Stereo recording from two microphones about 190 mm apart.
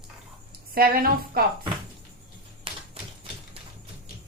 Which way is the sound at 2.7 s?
30° right (ahead or behind).